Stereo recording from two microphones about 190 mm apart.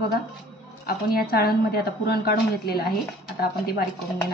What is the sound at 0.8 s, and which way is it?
Speech, 55° left (ahead or behind).